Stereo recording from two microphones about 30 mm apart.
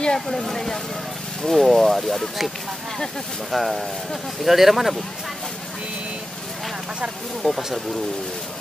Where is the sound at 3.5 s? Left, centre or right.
Centre.